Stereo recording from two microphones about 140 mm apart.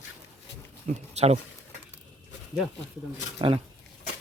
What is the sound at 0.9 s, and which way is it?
Speech, 50° right (ahead or behind).